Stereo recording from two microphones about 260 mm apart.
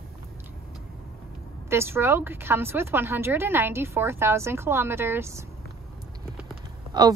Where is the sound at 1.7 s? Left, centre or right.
Centre.